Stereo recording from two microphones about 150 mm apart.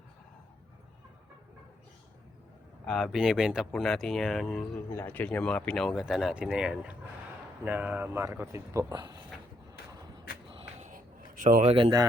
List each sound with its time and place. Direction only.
2.8 s speech: centre (ahead or behind); by 9.1 s 25° right (ahead or behind)
10.5 s a sound: 45° right (ahead or behind)
11.8 s speech: 30° right (ahead or behind)